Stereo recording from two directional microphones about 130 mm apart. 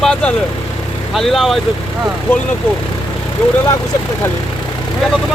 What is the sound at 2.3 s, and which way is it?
Speech, 15° left (ahead or behind).